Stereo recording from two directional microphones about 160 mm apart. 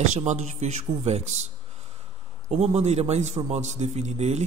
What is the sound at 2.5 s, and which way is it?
Speech, 40° right (ahead or behind).